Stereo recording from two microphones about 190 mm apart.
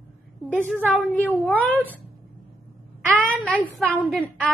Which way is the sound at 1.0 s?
10° left (ahead or behind).